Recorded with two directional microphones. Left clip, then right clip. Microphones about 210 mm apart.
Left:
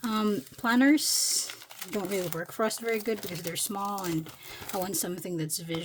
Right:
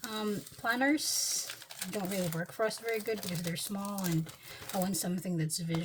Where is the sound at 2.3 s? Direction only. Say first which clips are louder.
Left 3 dB; 40° left (ahead or behind).